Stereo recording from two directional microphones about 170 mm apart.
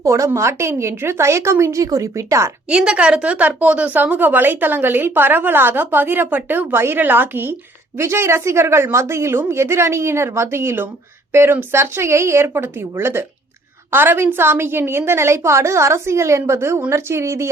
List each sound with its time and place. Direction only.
0.0 s a woman's voice: 20° right (ahead or behind)
2.6 s a woman's voice: 5° right (ahead or behind)